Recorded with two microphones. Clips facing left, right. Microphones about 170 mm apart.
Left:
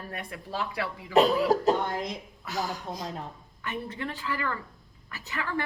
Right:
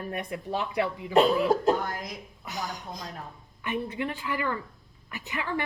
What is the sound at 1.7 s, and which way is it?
Speech, 25° left (ahead or behind).